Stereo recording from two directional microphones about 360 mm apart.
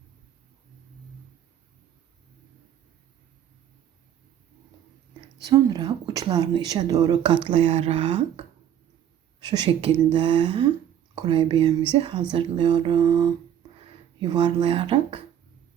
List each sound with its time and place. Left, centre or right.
5.4 s speech: centre